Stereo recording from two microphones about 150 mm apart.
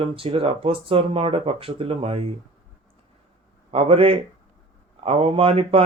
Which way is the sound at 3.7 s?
40° right (ahead or behind).